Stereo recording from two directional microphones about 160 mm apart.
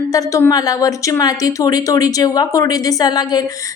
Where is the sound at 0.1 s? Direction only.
20° left (ahead or behind).